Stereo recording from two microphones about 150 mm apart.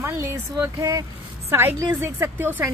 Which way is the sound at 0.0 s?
20° right (ahead or behind).